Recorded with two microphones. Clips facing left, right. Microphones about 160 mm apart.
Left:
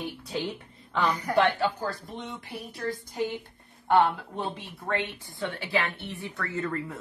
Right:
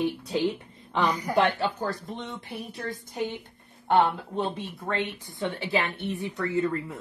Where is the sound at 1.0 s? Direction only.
15° right (ahead or behind).